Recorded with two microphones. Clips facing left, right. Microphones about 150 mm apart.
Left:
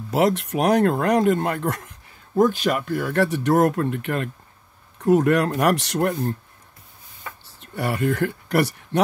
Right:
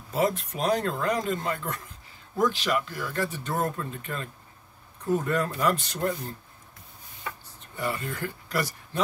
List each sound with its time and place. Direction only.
0.1 s speech: 75° left (ahead or behind)
2.3 s speech: 55° left (ahead or behind); by 4.3 s 70° left (ahead or behind)
5.0 s speech: 80° left; by 6.3 s 65° left (ahead or behind)
7.7 s speech: 70° left (ahead or behind)